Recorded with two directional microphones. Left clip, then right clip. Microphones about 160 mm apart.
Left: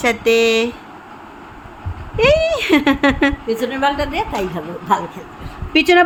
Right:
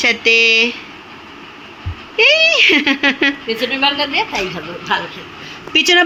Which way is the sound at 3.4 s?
90° left.